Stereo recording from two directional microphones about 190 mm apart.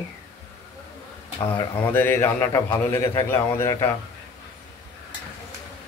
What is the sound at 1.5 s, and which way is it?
Speech, 10° left (ahead or behind).